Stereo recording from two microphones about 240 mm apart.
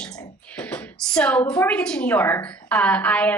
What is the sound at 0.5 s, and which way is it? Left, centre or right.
A woman's voice, centre.